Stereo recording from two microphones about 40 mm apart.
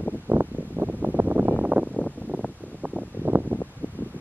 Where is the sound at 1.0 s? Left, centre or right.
Right.